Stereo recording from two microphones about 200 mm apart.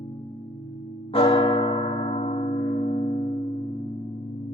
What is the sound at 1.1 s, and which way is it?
Church bell, 30° left (ahead or behind).